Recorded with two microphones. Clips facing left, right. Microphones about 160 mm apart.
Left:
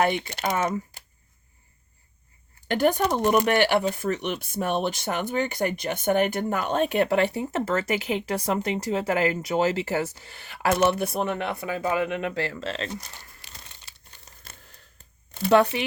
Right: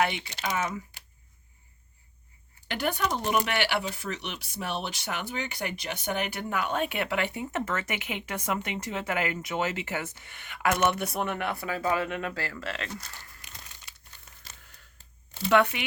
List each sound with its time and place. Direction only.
0.0 s speech: 50° left (ahead or behind)
0.6 s speech: 40° left (ahead or behind)
2.6 s speech: 45° left (ahead or behind); by 13.4 s 20° left (ahead or behind)
13.4 s crumpling: 30° left (ahead or behind)
15.4 s speech: 35° left (ahead or behind)